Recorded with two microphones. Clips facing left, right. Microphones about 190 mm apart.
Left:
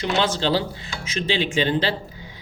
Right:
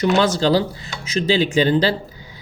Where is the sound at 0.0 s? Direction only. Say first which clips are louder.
Right 6 dB; 40° right (ahead or behind).